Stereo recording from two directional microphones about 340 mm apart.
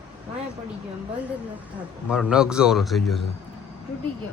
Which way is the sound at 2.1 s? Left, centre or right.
Centre.